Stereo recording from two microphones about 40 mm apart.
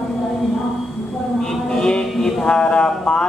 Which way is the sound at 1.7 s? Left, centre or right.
Centre.